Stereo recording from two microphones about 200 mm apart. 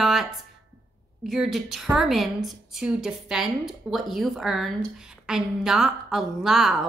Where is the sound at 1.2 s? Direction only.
Centre (ahead or behind).